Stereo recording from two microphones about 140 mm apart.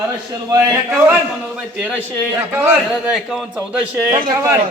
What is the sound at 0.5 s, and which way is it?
Speech, 20° right (ahead or behind).